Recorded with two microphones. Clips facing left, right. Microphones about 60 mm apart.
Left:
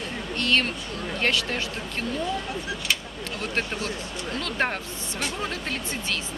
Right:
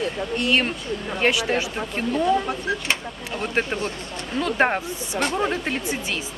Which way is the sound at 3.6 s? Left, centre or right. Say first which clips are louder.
Right 4 dB; centre.